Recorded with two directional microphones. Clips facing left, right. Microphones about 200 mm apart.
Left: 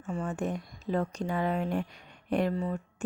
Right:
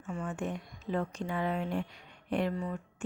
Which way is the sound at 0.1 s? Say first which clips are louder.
Left 4 dB; 35° left (ahead or behind).